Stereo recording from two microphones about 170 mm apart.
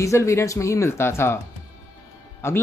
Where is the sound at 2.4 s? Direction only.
15° left (ahead or behind).